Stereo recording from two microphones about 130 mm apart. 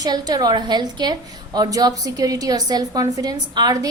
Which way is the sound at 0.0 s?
30° right (ahead or behind).